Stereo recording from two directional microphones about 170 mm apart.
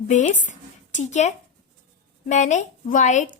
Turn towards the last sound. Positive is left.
turn(degrees=45)  # may be behind; listen again after turning